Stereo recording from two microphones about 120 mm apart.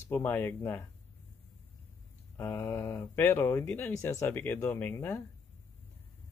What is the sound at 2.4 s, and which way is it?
Speech, 20° left (ahead or behind).